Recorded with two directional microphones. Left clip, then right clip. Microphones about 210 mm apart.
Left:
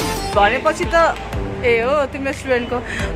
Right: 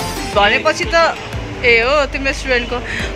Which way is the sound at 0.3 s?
5° left (ahead or behind).